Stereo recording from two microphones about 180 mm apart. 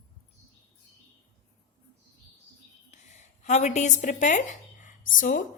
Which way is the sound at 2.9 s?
40° left (ahead or behind).